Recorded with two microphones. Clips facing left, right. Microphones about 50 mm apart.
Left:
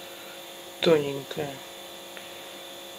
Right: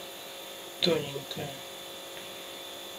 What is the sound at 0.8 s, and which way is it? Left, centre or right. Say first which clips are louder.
Speech: left 7 dB; left.